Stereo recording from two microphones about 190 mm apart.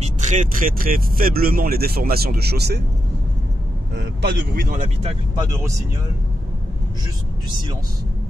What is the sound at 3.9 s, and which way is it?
Speech, 60° right (ahead or behind).